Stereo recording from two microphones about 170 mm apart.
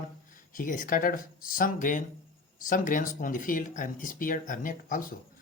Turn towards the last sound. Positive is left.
turn(degrees=50)  # may be behind; listen again after turning